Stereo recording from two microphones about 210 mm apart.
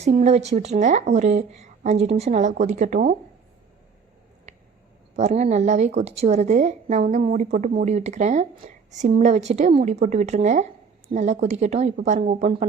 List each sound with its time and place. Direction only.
0.0 s a woman's voice: 30° right (ahead or behind)
5.1 s a woman's voice: 30° right (ahead or behind)